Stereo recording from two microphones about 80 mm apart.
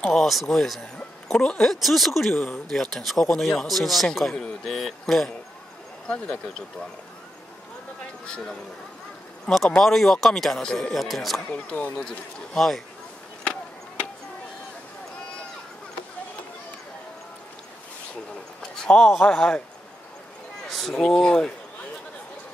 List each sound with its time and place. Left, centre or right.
0.0 s speech: centre
6.0 s speech: centre
9.7 s speech: centre
11.4 s speech: centre
12.0 s speech: centre
18.6 s speech: centre
20.7 s speech: centre